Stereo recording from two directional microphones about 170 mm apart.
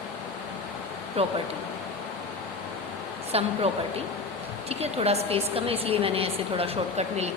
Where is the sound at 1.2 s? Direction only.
35° right (ahead or behind).